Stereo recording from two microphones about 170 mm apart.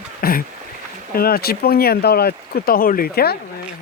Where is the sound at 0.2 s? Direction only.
60° left (ahead or behind).